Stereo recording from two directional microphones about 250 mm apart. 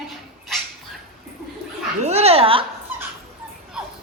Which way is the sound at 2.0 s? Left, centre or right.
Right.